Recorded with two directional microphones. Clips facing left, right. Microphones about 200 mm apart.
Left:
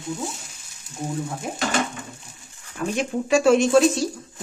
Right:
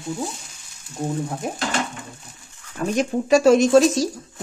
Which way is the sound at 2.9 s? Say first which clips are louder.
Right 3 dB; 40° right (ahead or behind).